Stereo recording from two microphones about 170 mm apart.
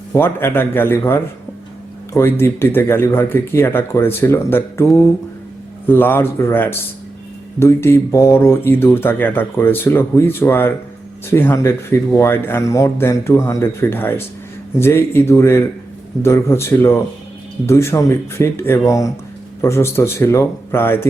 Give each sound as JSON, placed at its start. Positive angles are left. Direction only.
{"t": 0.1, "sound": "speech", "side_deg": 15}
{"t": 5.9, "sound": "speech", "side_deg": 10}